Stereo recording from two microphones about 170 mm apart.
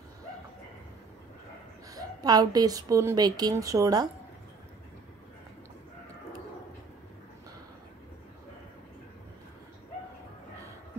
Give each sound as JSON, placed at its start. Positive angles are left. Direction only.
{"t": 1.9, "sound": "a woman's voice", "side_deg": -20}